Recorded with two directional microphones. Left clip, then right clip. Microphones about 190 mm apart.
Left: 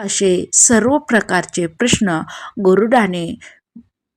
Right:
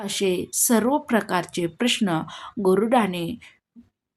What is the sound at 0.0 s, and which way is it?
A woman's voice, 30° left (ahead or behind).